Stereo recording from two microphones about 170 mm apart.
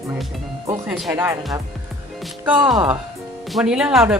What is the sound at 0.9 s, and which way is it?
Speech, 5° right (ahead or behind).